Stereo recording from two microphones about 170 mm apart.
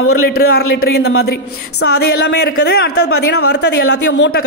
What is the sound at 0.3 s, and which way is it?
A man's voice, 70° left (ahead or behind).